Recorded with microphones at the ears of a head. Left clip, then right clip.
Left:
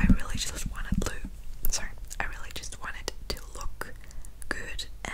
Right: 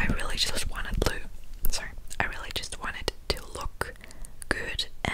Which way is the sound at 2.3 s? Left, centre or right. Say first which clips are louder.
Right 6 dB; right.